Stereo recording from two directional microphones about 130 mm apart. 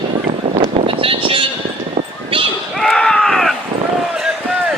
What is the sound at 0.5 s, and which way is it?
Sheep, 45° right (ahead or behind).